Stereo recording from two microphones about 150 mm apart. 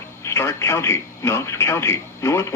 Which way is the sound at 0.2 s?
20° left (ahead or behind).